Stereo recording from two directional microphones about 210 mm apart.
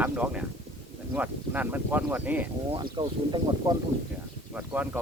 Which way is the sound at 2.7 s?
20° right (ahead or behind).